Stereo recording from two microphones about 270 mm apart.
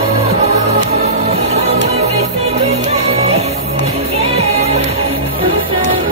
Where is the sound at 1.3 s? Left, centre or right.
Right.